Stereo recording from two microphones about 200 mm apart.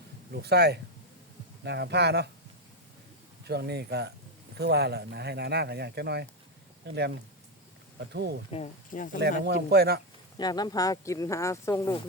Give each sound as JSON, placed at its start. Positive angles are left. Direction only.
{"t": 0.3, "sound": "speech", "side_deg": -55}
{"t": 3.4, "sound": "speech", "side_deg": -55}
{"t": 8.1, "sound": "speech", "side_deg": -55}
{"t": 8.4, "sound": "speech", "side_deg": 30}
{"t": 9.1, "sound": "speech", "side_deg": -55}
{"t": 10.3, "sound": "speech", "side_deg": 20}